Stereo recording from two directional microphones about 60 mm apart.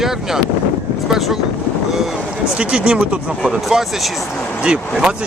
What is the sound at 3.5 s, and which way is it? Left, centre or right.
Speech, centre.